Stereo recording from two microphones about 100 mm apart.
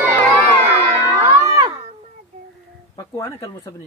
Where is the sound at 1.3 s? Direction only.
40° right (ahead or behind).